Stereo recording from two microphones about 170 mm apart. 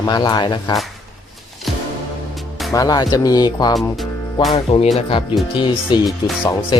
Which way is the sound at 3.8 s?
Centre (ahead or behind).